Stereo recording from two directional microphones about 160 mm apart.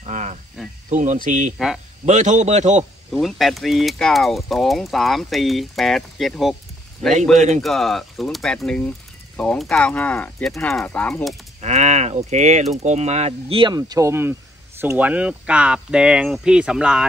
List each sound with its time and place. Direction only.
0.0 s cricket: 45° right (ahead or behind)
0.8 s speech: 50° right (ahead or behind)
3.1 s speech: centre (ahead or behind)
7.3 s speech: 50° right (ahead or behind)
7.6 s speech: centre (ahead or behind)
11.6 s speech: 45° right (ahead or behind); by 17.1 s 5° right (ahead or behind)